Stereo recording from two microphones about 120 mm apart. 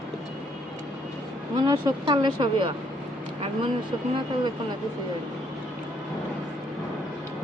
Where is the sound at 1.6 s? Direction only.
30° right (ahead or behind).